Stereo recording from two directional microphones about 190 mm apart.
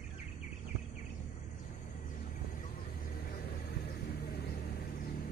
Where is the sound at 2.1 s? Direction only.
45° left (ahead or behind).